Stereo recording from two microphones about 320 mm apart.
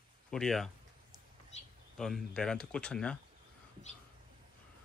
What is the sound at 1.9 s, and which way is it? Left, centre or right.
Speech, centre.